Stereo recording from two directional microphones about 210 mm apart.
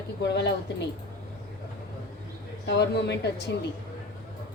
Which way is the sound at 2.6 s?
50° left (ahead or behind).